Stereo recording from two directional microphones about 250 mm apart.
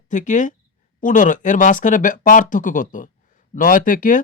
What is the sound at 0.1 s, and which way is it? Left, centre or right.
Speech, left.